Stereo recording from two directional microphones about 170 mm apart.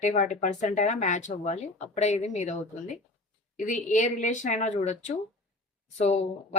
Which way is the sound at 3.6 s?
50° left (ahead or behind).